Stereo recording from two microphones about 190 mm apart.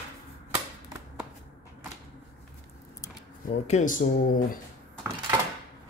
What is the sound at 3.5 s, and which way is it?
Speech, 40° left (ahead or behind).